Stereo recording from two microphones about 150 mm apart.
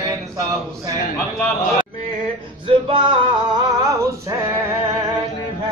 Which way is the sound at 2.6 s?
35° right (ahead or behind).